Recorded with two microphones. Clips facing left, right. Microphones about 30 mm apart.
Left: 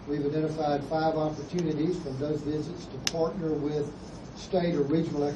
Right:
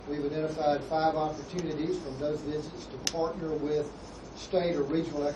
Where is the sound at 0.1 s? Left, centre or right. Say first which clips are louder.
Left 3 dB; centre.